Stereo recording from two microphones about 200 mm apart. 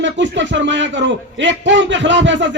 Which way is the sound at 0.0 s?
65° right (ahead or behind).